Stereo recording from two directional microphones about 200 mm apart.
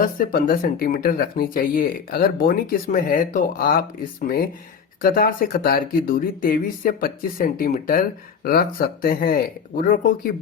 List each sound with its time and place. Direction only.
0.0 s speech: 45° left (ahead or behind)
5.0 s speech: 45° left (ahead or behind)